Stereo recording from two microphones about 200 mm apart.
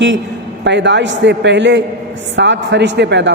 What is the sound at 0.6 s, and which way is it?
Speech, 60° right (ahead or behind).